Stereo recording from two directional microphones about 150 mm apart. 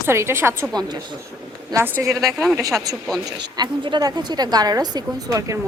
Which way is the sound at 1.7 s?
15° right (ahead or behind).